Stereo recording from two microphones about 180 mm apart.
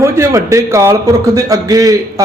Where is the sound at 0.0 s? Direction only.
15° right (ahead or behind).